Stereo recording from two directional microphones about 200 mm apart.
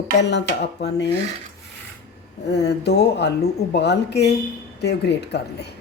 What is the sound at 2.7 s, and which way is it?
A woman's voice, 55° left (ahead or behind).